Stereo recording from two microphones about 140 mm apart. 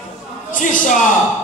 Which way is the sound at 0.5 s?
70° left (ahead or behind).